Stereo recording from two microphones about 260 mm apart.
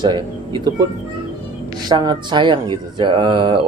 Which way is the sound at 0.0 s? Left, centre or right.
Centre.